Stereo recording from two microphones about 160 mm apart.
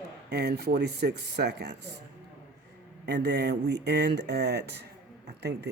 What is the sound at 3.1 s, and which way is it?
Speech, 90° right.